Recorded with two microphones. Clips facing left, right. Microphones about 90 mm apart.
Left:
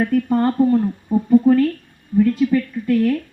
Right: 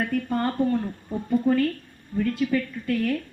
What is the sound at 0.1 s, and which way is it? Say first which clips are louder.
Speech: left 8 dB; 10° left (ahead or behind).